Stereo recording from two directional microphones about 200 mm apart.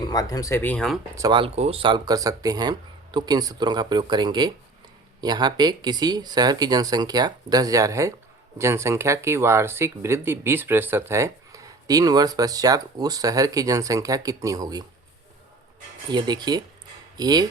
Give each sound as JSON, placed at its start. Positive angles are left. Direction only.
{"t": 0.1, "sound": "speech", "side_deg": 20}
{"t": 1.1, "sound": "speech", "side_deg": -20}
{"t": 16.0, "sound": "speech", "side_deg": -20}